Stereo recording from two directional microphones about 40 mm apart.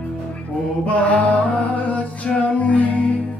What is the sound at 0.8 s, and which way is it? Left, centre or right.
Music, left.